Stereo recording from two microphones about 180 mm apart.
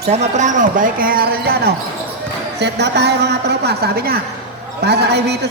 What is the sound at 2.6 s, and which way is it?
A man's voice, 70° right (ahead or behind).